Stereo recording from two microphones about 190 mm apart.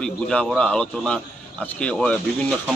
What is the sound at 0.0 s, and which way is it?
A man's voice, 5° left (ahead or behind).